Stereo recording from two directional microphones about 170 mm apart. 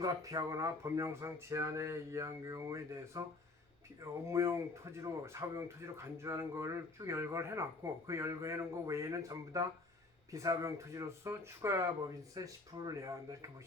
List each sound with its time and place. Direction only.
0.0 s speech: 20° right (ahead or behind)